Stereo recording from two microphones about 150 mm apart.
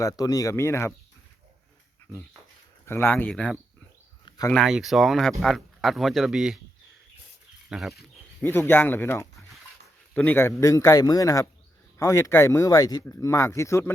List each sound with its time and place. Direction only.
0.0 s speech: 25° left (ahead or behind)
2.8 s speech: 15° left (ahead or behind); by 6.6 s 5° right (ahead or behind)
7.7 s speech: centre (ahead or behind)
8.4 s speech: 15° left (ahead or behind)